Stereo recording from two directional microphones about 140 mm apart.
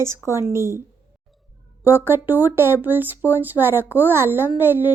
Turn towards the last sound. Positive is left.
turn(degrees=-15)  # may be behind; listen again after turning